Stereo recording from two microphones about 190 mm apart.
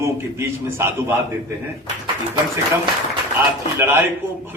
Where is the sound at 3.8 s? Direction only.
10° right (ahead or behind).